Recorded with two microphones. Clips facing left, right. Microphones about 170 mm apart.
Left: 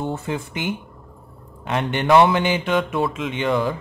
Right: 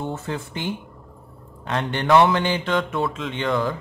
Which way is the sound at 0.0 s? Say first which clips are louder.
Left 3 dB; 15° left (ahead or behind).